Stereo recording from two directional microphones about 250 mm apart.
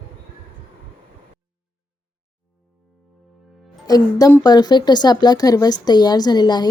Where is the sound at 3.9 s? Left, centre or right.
Centre.